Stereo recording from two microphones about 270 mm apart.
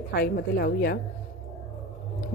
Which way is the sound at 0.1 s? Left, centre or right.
Left.